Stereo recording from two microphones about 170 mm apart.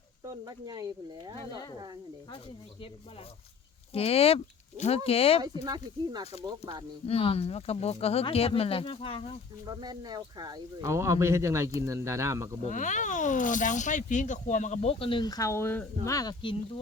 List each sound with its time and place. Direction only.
0.3 s speech: 20° right (ahead or behind)
3.9 s speech: 35° left (ahead or behind)
5.6 s speech: 25° right (ahead or behind)
7.0 s speech: 35° left (ahead or behind)
9.6 s speech: 25° right (ahead or behind)
12.6 s speech: 45° left (ahead or behind); by 16.6 s 25° left (ahead or behind)